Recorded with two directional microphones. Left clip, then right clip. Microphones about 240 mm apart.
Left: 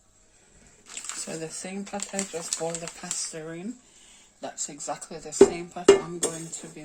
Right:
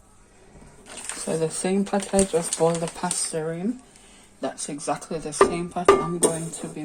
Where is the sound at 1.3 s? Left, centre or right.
Centre.